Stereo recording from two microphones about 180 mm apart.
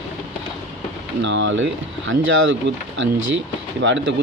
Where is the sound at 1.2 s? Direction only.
90° right.